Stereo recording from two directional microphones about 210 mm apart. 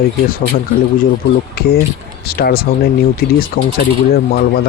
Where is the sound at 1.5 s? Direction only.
50° left (ahead or behind).